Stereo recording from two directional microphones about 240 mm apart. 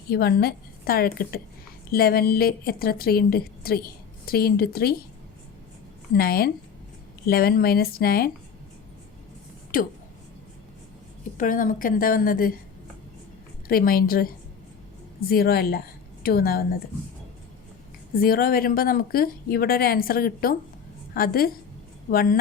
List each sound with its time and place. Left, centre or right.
0.1 s a woman's voice: left
6.1 s a woman's voice: left
9.7 s speech: left
11.3 s a woman's voice: left
13.7 s a woman's voice: left
15.3 s a woman's voice: left
18.2 s a woman's voice: left